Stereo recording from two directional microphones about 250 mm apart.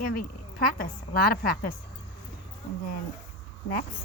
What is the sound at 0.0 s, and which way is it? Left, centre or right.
A woman's voice, left.